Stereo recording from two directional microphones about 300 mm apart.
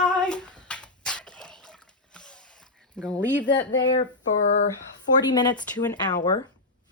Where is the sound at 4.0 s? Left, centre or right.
Left.